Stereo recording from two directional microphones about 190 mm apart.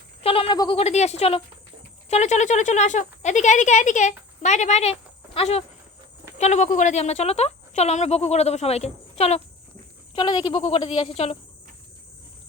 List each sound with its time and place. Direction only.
0.2 s speech: 30° left (ahead or behind)